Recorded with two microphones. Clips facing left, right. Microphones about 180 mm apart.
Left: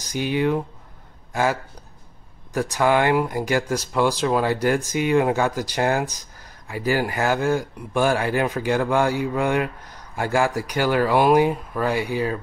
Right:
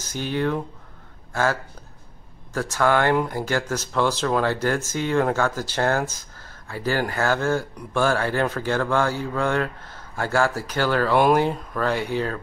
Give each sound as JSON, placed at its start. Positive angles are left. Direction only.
{"t": 0.0, "sound": "speech", "side_deg": 15}